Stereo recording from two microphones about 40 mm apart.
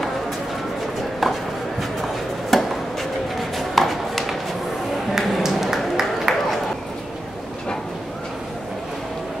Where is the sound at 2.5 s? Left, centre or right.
Centre.